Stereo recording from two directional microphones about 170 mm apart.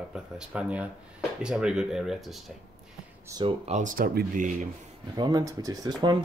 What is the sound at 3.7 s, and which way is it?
Speech, 50° right (ahead or behind).